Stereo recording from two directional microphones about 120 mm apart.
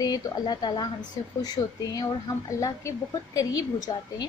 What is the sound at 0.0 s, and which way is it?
A woman's voice, 35° left (ahead or behind).